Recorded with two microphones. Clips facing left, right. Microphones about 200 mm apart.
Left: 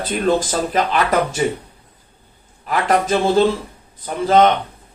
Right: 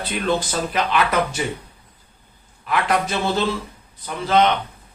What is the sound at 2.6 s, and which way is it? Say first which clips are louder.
Speech: left 4 dB; 40° left (ahead or behind).